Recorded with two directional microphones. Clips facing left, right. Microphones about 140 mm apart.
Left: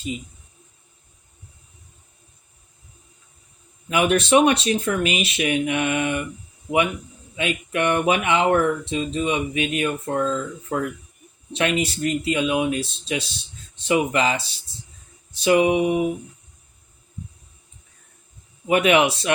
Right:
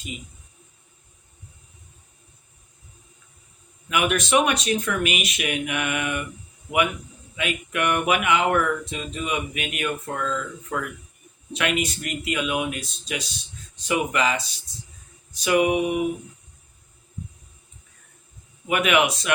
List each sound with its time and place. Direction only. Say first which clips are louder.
3.8 s speech: left 4 dB; 30° left (ahead or behind)
7.3 s speech: left 3 dB; 30° left (ahead or behind)
18.7 s speech: left 4 dB; 30° left (ahead or behind)